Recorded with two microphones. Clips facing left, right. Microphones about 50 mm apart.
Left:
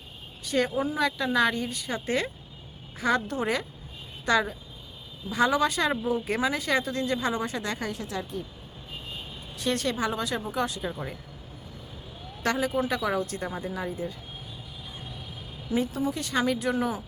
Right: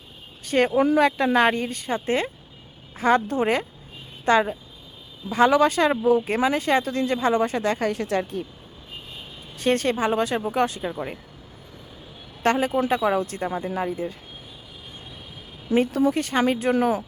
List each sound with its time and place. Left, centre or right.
0.4 s speech: right
9.6 s speech: right
10.8 s speech: right
12.4 s speech: right
15.7 s speech: right
16.1 s speech: right